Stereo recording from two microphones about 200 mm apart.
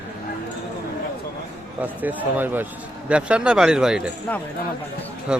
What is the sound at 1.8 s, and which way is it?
A man's voice, 10° right (ahead or behind).